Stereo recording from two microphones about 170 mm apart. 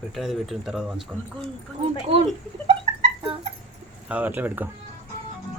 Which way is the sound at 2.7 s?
35° right (ahead or behind).